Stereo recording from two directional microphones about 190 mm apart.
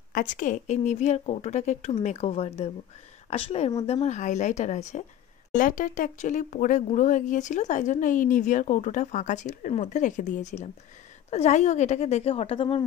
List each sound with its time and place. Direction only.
0.1 s speech: 45° left (ahead or behind); by 12.8 s 30° left (ahead or behind)